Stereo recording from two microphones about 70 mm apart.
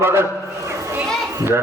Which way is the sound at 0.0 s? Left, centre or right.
Right.